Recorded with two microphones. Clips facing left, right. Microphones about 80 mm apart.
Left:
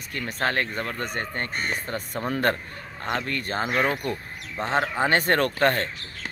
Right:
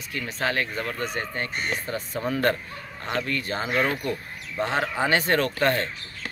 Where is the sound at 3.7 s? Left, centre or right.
Centre.